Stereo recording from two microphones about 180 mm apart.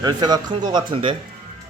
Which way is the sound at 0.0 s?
20° right (ahead or behind).